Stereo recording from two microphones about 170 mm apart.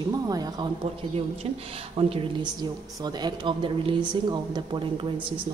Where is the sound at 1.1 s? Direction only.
35° right (ahead or behind).